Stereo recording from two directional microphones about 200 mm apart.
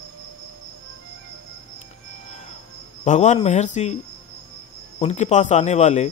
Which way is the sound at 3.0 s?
35° left (ahead or behind).